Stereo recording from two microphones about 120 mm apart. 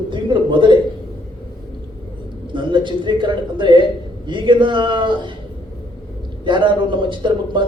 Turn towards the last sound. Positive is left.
turn(degrees=-40)  # may be behind; listen again after turning